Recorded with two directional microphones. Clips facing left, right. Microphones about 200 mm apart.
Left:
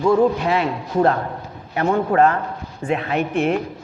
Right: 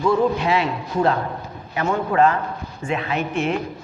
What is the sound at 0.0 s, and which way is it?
Speech, 45° left (ahead or behind).